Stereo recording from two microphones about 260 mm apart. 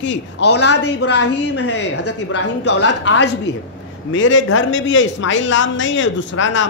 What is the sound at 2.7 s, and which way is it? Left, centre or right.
Speech, left.